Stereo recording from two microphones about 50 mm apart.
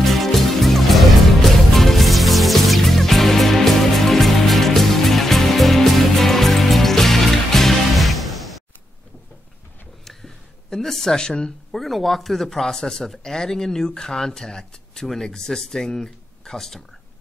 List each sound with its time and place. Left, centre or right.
0.0 s music: centre
10.0 s a sound: centre
11.7 s speech: centre